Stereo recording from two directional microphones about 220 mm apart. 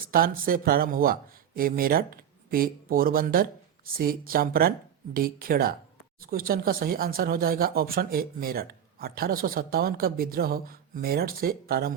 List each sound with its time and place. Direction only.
0.0 s speech: 40° right (ahead or behind)